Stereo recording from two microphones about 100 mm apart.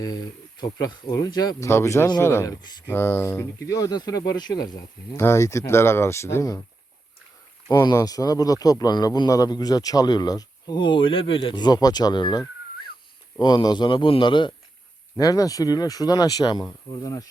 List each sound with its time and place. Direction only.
0.0 s a man's voice: 40° left (ahead or behind)
1.6 s speech: 30° left (ahead or behind)
2.6 s a man's voice: 45° left (ahead or behind)
2.8 s a man's voice: 20° left (ahead or behind); by 4.8 s 40° left (ahead or behind)
5.1 s speech: 25° left (ahead or behind)
7.7 s a man's voice: 45° left (ahead or behind)
15.2 s a man's voice: 40° left (ahead or behind)